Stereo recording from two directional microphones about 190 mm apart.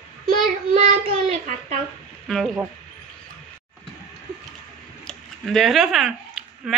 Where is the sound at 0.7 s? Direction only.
35° right (ahead or behind).